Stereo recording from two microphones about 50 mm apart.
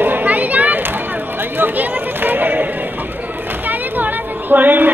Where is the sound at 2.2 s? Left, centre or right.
Right.